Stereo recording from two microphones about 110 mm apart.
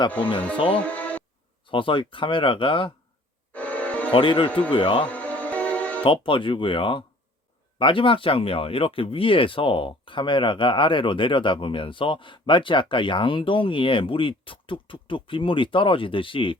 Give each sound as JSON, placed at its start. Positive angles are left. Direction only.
{"t": 0.5, "sound": "speech", "side_deg": 50}
{"t": 0.8, "sound": "music", "side_deg": 15}
{"t": 1.6, "sound": "speech", "side_deg": 50}
{"t": 3.5, "sound": "music", "side_deg": 15}
{"t": 4.1, "sound": "speech", "side_deg": 50}
{"t": 4.4, "sound": "a man's voice", "side_deg": 15}
{"t": 4.7, "sound": "speech", "side_deg": 55}
{"t": 5.0, "sound": "music", "side_deg": 15}
{"t": 6.0, "sound": "speech", "side_deg": 50}